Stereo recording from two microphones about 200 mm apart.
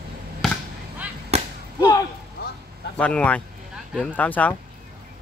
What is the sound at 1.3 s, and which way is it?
Whip, 30° right (ahead or behind).